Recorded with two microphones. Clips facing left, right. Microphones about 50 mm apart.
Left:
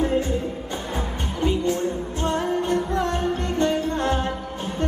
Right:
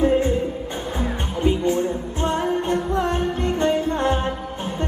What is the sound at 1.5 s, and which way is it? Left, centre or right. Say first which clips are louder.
Music: right 3 dB; right.